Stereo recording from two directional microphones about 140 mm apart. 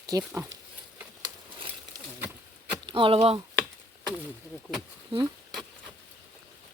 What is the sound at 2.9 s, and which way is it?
Speech, 35° right (ahead or behind).